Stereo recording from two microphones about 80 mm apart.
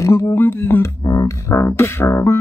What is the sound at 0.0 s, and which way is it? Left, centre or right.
Speech, left.